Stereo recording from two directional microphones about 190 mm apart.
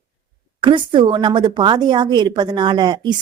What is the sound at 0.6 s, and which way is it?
A woman's voice, 25° right (ahead or behind).